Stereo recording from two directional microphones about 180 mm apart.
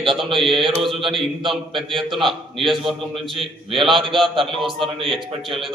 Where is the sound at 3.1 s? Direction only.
30° right (ahead or behind).